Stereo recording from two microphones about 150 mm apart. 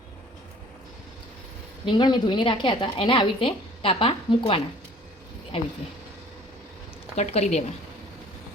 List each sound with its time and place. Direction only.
1.8 s a woman's voice: 30° left (ahead or behind)
7.2 s speech: 45° left (ahead or behind)